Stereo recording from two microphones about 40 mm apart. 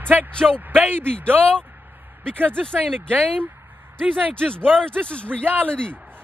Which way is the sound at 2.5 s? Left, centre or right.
Centre.